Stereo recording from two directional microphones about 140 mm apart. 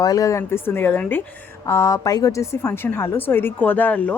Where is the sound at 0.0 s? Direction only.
25° left (ahead or behind).